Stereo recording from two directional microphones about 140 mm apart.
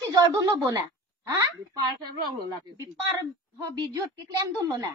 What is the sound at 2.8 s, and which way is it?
A woman's voice, 25° right (ahead or behind).